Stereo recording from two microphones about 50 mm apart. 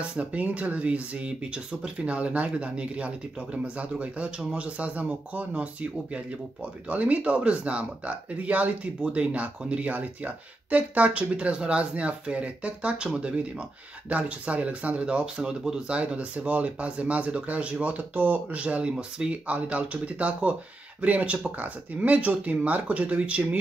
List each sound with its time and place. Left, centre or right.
0.1 s speech: right